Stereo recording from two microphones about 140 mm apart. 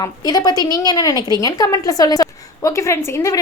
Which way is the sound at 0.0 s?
25° left (ahead or behind).